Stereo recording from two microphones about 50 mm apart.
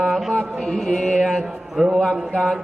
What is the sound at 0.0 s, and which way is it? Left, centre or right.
Mantra, centre.